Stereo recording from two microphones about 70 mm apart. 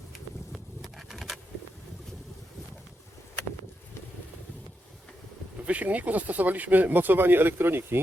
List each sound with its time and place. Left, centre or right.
0.5 s bee: centre
5.6 s speech: right